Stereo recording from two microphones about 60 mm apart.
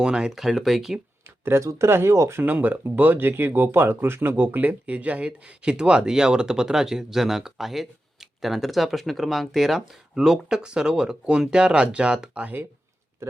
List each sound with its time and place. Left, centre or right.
0.0 s speech: centre
1.5 s speech: right
2.4 s speech: right